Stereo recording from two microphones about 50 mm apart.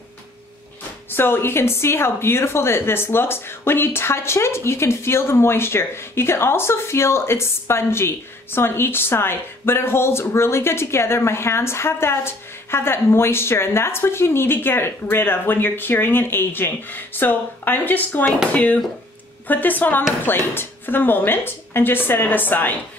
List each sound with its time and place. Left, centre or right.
1.1 s a woman's voice: left
18.5 s speech: left
20.2 s a woman's voice: left